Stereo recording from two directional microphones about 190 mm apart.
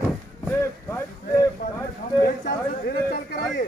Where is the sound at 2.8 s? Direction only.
50° left (ahead or behind).